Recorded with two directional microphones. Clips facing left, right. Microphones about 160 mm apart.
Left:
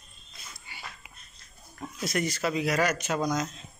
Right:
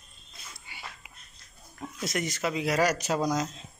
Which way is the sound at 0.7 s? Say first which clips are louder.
Even; 20° right (ahead or behind).